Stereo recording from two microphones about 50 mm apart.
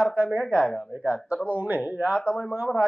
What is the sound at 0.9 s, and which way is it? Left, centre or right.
A man's voice, right.